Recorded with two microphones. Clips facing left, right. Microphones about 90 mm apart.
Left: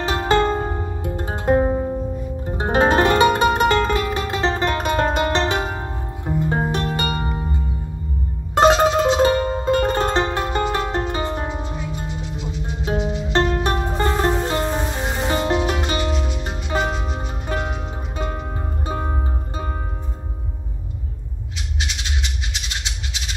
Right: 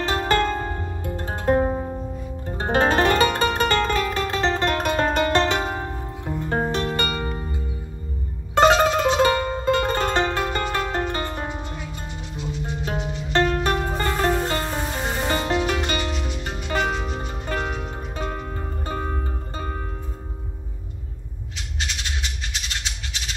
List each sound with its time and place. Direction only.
0.0 s music: 20° left (ahead or behind)
6.3 s music: 10° left (ahead or behind)
8.5 s music: 20° left (ahead or behind)